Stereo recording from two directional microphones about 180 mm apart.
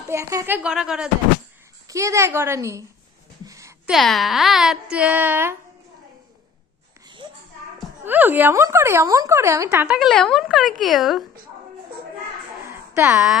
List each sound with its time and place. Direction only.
0.1 s a woman's voice: 15° right (ahead or behind)
1.9 s a woman's voice: 15° right (ahead or behind)
3.4 s a sound: 20° right (ahead or behind)
3.8 s speech: centre (ahead or behind)
8.0 s a woman's voice: 10° right (ahead or behind)
12.6 s a sound: 15° right (ahead or behind)